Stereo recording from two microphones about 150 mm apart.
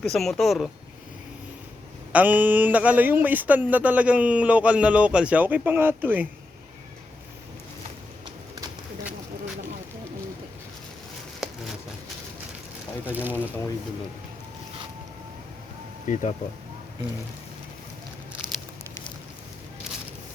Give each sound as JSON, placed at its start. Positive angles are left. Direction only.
{"t": 0.0, "sound": "speech", "side_deg": 0}
{"t": 2.1, "sound": "speech", "side_deg": -10}
{"t": 13.1, "sound": "speech", "side_deg": -10}
{"t": 16.1, "sound": "speech", "side_deg": 55}
{"t": 18.4, "sound": "a sound", "side_deg": -30}